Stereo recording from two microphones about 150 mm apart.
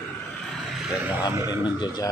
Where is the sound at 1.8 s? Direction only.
25° left (ahead or behind).